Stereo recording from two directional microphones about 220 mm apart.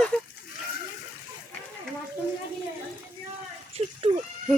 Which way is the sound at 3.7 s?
25° right (ahead or behind).